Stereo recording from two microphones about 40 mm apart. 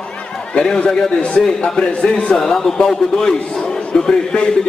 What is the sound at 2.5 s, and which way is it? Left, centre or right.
A man's voice, centre.